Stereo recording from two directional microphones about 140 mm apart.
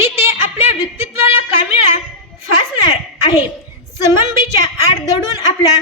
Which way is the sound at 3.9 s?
20° right (ahead or behind).